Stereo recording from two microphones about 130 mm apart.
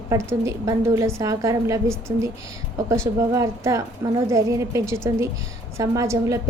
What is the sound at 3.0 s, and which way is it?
A woman's voice, 25° right (ahead or behind).